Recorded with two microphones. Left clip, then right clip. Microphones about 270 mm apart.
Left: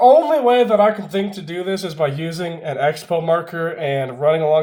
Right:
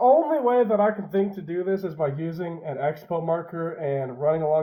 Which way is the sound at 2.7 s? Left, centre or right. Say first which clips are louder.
Left 8 dB; left.